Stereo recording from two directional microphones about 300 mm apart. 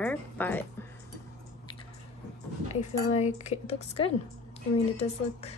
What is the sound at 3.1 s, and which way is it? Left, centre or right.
Speech, left.